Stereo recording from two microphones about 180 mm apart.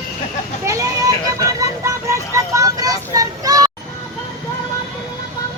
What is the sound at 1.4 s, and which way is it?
Vehicle, 20° right (ahead or behind).